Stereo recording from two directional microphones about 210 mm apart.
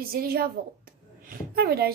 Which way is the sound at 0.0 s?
45° right (ahead or behind).